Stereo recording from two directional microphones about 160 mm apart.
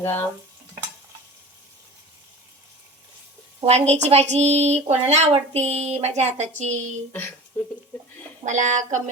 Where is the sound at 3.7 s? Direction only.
40° right (ahead or behind).